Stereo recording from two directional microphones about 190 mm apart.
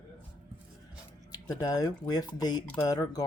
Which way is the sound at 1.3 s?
20° left (ahead or behind).